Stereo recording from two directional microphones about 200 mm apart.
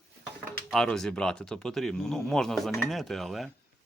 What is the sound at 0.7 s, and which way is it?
Speech, centre (ahead or behind).